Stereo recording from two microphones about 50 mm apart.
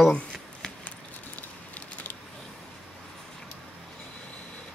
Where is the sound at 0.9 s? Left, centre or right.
Left.